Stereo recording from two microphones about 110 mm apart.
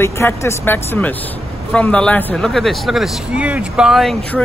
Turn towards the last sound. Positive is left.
turn(degrees=0)  # may be behind; listen again after turning